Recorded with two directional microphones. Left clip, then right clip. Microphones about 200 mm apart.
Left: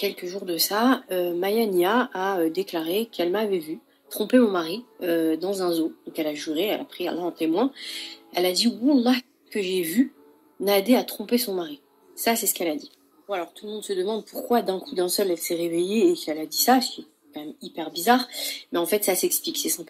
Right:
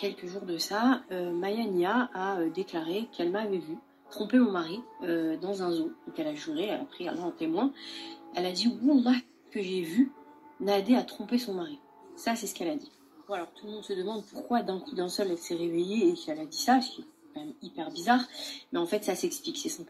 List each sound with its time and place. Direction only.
0.0 s speech: 45° left (ahead or behind)